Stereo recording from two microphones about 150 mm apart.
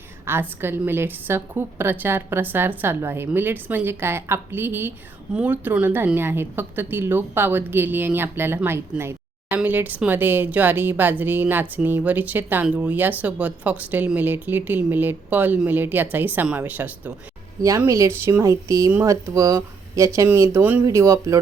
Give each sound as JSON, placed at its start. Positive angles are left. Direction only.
{"t": 0.3, "sound": "a woman's voice", "side_deg": -15}
{"t": 17.6, "sound": "a woman's voice", "side_deg": -20}